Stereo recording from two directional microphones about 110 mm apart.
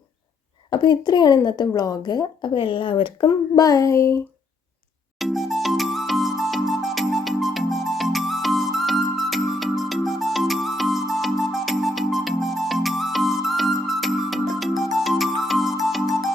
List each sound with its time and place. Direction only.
0.7 s a woman's voice: 45° left (ahead or behind)
3.2 s speech: 35° left (ahead or behind)
5.2 s music: centre (ahead or behind)